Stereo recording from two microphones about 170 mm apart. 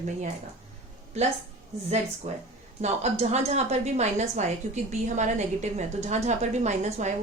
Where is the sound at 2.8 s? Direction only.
40° right (ahead or behind).